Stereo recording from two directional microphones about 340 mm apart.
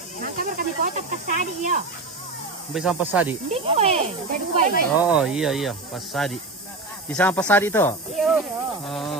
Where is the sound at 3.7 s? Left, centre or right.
Centre.